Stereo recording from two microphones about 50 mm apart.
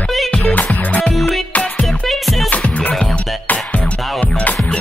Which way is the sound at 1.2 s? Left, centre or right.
Centre.